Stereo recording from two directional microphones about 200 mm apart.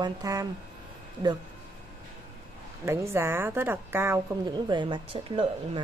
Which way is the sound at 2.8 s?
15° right (ahead or behind).